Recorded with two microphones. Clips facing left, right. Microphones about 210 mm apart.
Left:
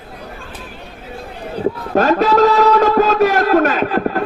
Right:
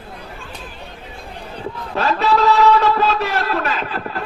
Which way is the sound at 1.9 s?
45° left (ahead or behind).